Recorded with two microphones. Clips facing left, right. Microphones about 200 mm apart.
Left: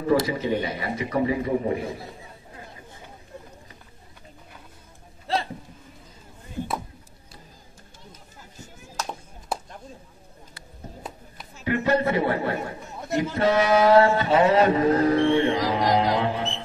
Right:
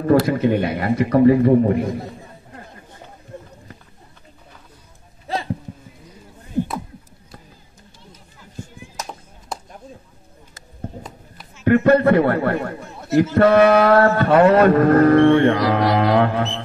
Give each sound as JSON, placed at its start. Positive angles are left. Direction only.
{"t": 0.0, "sound": "speech", "side_deg": -55}
{"t": 8.4, "sound": "chop", "side_deg": 40}
{"t": 11.6, "sound": "a man's voice", "side_deg": -55}